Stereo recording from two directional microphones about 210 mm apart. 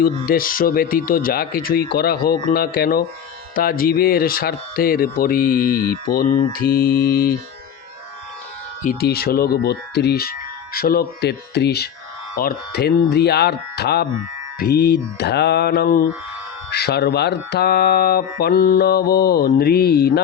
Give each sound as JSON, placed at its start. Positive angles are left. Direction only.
{"t": 0.0, "sound": "speech", "side_deg": 45}
{"t": 8.8, "sound": "speech", "side_deg": 45}